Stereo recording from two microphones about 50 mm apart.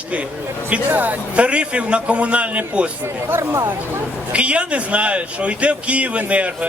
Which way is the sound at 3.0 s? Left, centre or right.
Right.